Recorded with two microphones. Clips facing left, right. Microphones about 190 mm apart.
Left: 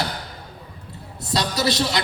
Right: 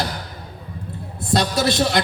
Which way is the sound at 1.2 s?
55° right (ahead or behind).